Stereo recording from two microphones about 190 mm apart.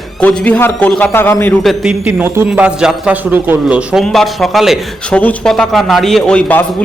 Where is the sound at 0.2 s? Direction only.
5° left (ahead or behind).